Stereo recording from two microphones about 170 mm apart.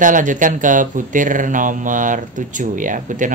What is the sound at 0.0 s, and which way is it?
Speech, 50° right (ahead or behind).